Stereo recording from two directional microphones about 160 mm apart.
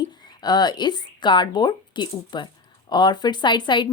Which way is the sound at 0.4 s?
25° left (ahead or behind).